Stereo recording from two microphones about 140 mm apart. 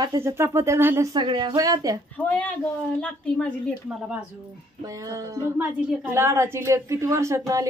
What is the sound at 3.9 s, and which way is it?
Speech, 5° right (ahead or behind).